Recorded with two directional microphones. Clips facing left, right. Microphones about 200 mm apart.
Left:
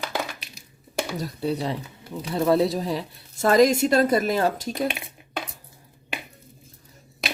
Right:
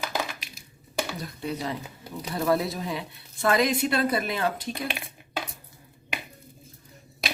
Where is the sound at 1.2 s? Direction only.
35° left (ahead or behind).